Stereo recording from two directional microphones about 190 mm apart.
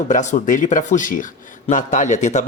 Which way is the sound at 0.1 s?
40° left (ahead or behind).